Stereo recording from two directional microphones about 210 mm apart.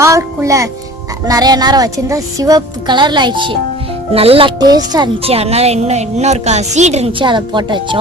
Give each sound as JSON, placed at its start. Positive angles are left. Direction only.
{"t": 0.0, "sound": "speech", "side_deg": -15}